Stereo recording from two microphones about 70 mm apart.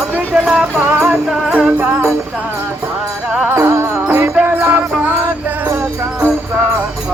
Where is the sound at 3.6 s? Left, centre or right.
Right.